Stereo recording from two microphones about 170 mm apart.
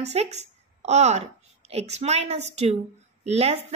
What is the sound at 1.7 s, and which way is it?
A woman's voice, 40° right (ahead or behind).